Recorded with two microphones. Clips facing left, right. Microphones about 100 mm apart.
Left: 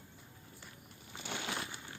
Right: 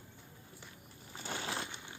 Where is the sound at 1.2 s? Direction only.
35° right (ahead or behind).